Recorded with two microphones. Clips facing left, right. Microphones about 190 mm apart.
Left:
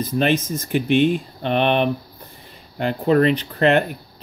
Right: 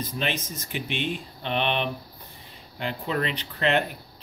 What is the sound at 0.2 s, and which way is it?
Speech, 50° left (ahead or behind).